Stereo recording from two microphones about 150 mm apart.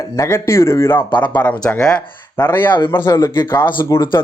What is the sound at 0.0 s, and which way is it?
Speech, 15° left (ahead or behind).